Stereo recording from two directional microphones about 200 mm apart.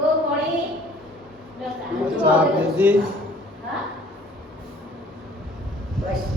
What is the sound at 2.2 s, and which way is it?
Speech, 5° right (ahead or behind).